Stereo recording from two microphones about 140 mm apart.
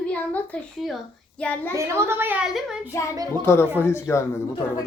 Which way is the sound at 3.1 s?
25° right (ahead or behind).